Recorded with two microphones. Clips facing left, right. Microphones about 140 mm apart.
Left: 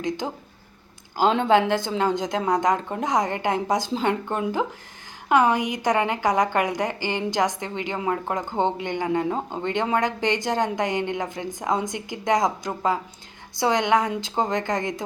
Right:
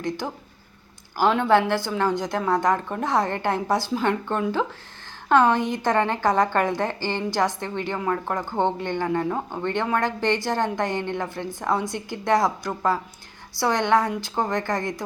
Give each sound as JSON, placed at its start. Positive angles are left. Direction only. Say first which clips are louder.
{"t": 1.1, "sound": "a woman's voice", "louder": "even", "side_deg": 20}